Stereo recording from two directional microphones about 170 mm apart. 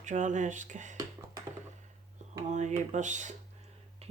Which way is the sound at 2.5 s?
45° right (ahead or behind).